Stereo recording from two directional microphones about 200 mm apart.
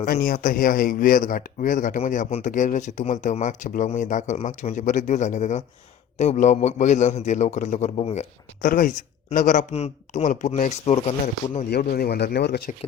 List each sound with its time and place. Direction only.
0.0 s a man's voice: 45° left (ahead or behind)
11.7 s speech: 50° left (ahead or behind)